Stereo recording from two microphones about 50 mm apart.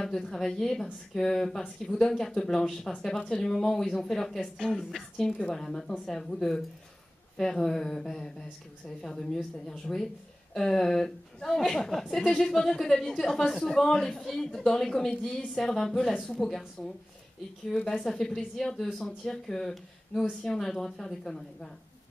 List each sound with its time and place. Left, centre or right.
0.0 s a woman's voice: centre
3.0 s a woman's voice: centre
16.0 s a woman's voice: centre
16.3 s a woman's voice: centre